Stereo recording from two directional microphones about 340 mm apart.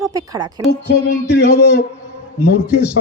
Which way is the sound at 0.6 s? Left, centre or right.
Left.